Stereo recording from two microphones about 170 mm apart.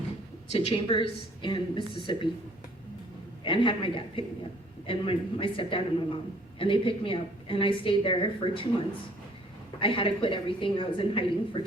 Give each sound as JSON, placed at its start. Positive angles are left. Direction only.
{"t": 0.5, "sound": "a woman's voice", "side_deg": 35}
{"t": 3.4, "sound": "a man's voice", "side_deg": 30}
{"t": 9.8, "sound": "a woman's voice", "side_deg": 30}